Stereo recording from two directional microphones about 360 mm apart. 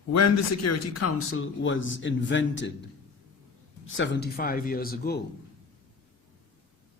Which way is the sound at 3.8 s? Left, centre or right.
Left.